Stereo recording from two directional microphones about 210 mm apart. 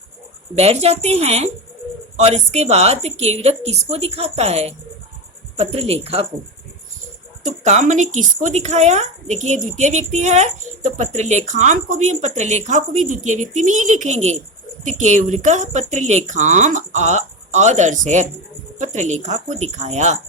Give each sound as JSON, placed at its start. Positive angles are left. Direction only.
{"t": 0.5, "sound": "speech", "side_deg": -30}
{"t": 7.4, "sound": "speech", "side_deg": -35}